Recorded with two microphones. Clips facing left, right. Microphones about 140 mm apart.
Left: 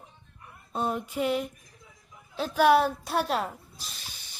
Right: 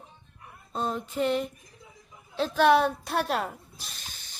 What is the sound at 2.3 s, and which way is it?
A woman's voice, 5° left (ahead or behind).